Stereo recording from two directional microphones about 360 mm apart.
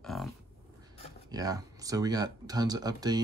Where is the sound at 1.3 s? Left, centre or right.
Centre.